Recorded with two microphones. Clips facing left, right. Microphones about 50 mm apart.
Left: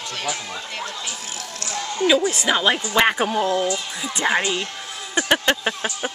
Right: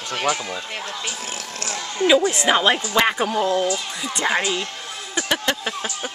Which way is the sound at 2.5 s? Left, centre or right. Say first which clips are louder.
Right 3 dB; centre.